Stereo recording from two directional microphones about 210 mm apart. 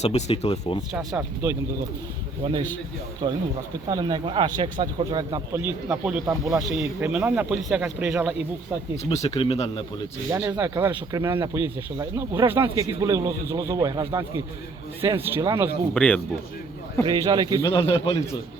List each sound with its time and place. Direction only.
0.0 s speech: 30° left (ahead or behind)
0.9 s speech: 10° right (ahead or behind)
2.4 s a man's voice: 20° right (ahead or behind); by 8.4 s 5° right (ahead or behind)
9.0 s speech: 30° left (ahead or behind)
10.2 s speech: 15° right (ahead or behind)
16.0 s speech: 5° left (ahead or behind)
17.1 s a man's voice: 20° right (ahead or behind)
17.6 s speech: 25° left (ahead or behind)